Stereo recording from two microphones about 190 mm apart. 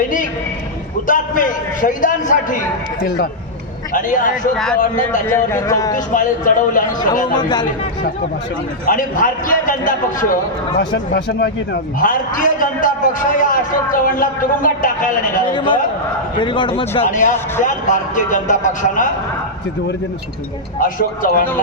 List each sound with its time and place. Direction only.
1.0 s a man's voice: 45° left (ahead or behind)
3.0 s speech: 55° left (ahead or behind)
3.9 s a man's voice: 45° left (ahead or behind)
4.5 s speech: centre (ahead or behind)
4.8 s a man's voice: 45° left (ahead or behind)
5.2 s speech: 15° left (ahead or behind)
6.1 s a man's voice: 45° left (ahead or behind)
7.3 s speech: 20° left (ahead or behind)
8.9 s a man's voice: 45° left (ahead or behind)
10.8 s a man's voice: 55° left (ahead or behind)
15.5 s a man's voice: 25° left (ahead or behind); by 19.1 s 40° left (ahead or behind)
20.7 s a man's voice: 45° left (ahead or behind)